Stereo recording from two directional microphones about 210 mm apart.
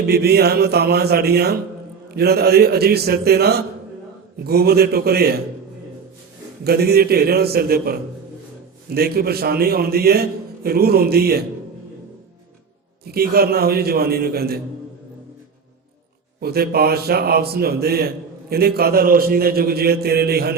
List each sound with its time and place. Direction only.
0.1 s a man's voice: 50° right (ahead or behind)
6.7 s a man's voice: 50° right (ahead or behind)
13.1 s a man's voice: 45° right (ahead or behind)
16.4 s a man's voice: 45° right (ahead or behind)